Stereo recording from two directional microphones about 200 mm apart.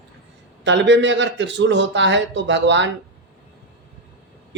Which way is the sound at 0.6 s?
65° right (ahead or behind).